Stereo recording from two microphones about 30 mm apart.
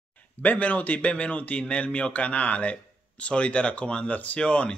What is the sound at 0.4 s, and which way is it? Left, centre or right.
Speech, left.